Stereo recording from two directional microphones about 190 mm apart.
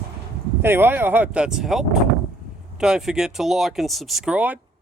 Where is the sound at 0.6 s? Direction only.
10° right (ahead or behind).